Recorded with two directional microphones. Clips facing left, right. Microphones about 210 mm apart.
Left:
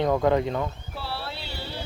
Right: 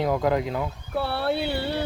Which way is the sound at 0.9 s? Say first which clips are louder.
Right 10 dB; 55° right (ahead or behind).